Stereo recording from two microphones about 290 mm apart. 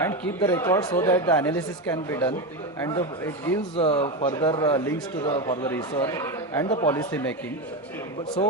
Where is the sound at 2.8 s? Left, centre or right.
Centre.